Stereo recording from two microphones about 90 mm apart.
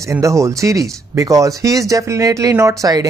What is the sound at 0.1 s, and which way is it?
Speech, 35° right (ahead or behind).